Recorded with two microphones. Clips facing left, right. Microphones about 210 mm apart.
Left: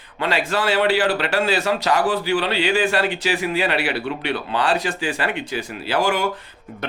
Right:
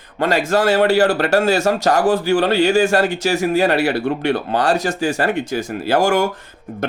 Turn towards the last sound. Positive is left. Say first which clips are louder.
# right 5 dB
turn(degrees=-45)  # may be behind; listen again after turning